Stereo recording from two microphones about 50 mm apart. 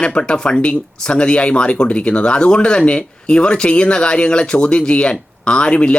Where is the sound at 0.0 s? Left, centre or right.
Centre.